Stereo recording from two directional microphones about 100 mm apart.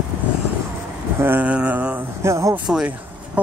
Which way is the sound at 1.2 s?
20° right (ahead or behind).